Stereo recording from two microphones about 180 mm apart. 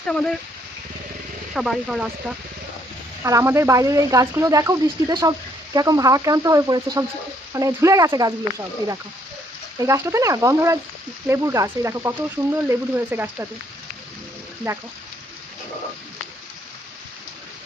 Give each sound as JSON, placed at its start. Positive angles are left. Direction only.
{"t": 0.1, "sound": "speech", "side_deg": 5}
{"t": 1.5, "sound": "speech", "side_deg": 0}
{"t": 3.2, "sound": "speech", "side_deg": -15}
{"t": 14.6, "sound": "speech", "side_deg": -15}